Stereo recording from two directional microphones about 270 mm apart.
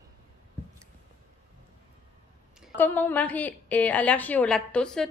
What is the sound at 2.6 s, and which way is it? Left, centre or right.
A woman's voice, centre.